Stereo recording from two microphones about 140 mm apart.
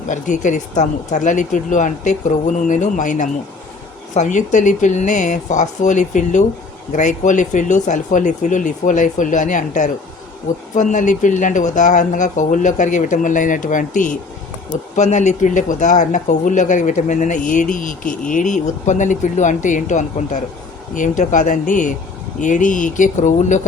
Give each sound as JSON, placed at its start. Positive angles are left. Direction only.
{"t": 0.1, "sound": "speech", "side_deg": 65}
{"t": 14.9, "sound": "speech", "side_deg": 60}